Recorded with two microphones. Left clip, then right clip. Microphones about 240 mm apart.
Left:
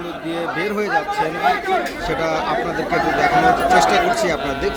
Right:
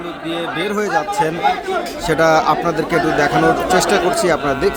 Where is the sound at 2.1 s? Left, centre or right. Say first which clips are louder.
Right 10 dB; right.